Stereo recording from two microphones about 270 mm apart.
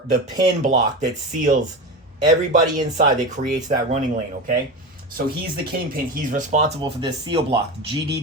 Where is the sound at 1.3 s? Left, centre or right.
Right.